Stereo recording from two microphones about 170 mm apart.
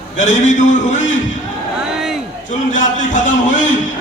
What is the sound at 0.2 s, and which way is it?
Speech, 45° left (ahead or behind).